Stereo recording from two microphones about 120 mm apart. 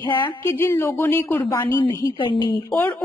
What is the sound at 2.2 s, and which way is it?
Speech, 45° left (ahead or behind).